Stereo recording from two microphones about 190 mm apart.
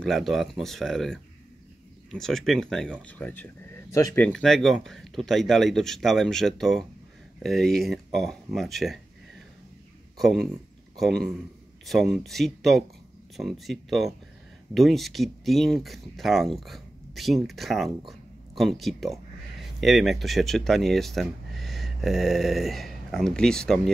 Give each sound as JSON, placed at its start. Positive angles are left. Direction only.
{"t": 0.0, "sound": "speech", "side_deg": 0}
{"t": 10.1, "sound": "speech", "side_deg": 0}